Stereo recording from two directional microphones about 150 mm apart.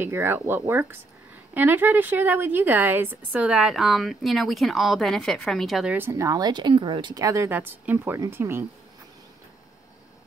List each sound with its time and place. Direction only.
0.0 s a woman's voice: 15° right (ahead or behind)
5.9 s speech: 20° right (ahead or behind)